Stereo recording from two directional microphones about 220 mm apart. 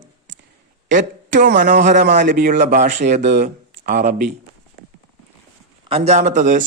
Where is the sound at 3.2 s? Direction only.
50° right (ahead or behind).